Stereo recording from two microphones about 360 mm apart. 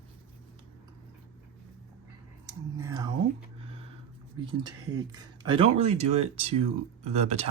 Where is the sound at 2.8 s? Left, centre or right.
Centre.